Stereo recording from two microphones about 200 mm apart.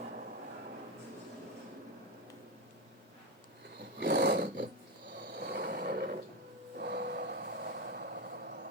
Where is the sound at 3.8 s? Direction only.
55° right (ahead or behind).